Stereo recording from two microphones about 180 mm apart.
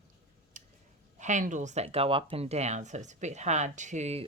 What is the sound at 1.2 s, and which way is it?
Speech, 45° right (ahead or behind).